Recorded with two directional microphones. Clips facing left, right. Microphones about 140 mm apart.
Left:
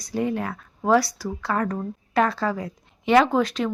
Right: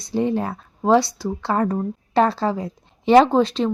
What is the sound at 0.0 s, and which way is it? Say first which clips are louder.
Speech: right 4 dB; 25° right (ahead or behind).